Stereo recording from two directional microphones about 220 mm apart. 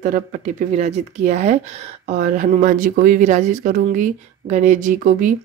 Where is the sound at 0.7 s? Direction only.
30° right (ahead or behind).